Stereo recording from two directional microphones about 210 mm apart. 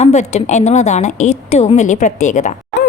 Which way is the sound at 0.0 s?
30° left (ahead or behind).